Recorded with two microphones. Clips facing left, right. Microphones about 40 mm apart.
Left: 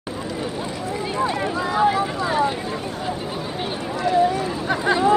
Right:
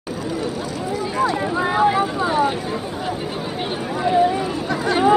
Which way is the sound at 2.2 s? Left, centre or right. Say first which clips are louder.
Right 1 dB; centre.